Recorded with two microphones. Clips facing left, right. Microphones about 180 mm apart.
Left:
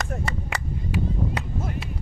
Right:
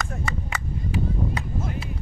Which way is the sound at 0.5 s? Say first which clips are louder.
Even; 80° left.